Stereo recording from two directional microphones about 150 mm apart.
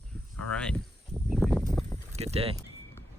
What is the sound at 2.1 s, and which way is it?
Speech, 45° right (ahead or behind).